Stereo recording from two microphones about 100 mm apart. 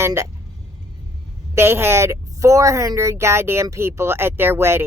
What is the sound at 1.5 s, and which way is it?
Speech, 25° right (ahead or behind).